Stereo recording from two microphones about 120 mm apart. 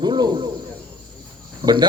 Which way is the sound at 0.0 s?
35° right (ahead or behind).